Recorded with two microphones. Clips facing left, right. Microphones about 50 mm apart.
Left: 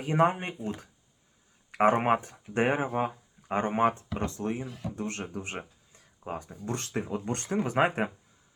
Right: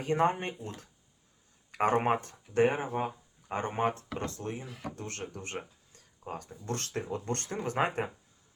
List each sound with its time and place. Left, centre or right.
0.0 s speech: centre
2.6 s speech: left